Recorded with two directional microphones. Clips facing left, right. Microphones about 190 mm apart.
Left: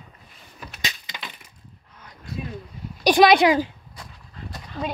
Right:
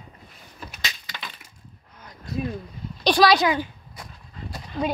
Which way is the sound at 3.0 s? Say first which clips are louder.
Left 3 dB; 10° left (ahead or behind).